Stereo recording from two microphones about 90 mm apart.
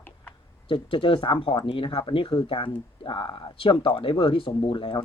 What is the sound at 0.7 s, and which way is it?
Speech, 80° left.